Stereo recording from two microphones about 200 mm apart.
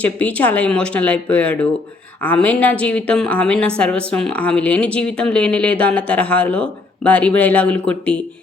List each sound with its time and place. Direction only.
0.0 s a woman's voice: 5° left (ahead or behind)